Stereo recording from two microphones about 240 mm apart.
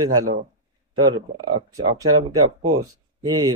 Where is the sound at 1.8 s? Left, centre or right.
Centre.